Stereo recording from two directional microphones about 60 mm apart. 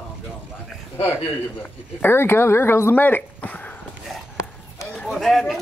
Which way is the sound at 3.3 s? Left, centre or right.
Left.